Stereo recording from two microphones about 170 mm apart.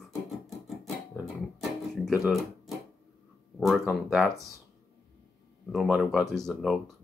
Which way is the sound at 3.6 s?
Centre (ahead or behind).